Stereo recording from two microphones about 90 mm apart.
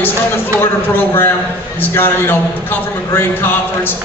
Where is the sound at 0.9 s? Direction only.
25° left (ahead or behind).